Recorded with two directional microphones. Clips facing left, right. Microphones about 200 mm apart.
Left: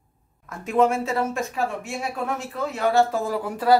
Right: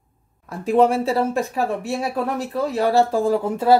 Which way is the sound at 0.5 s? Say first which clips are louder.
Right 4 dB; 35° right (ahead or behind).